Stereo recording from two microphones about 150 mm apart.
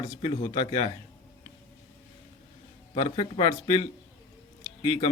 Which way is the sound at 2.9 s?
40° left (ahead or behind).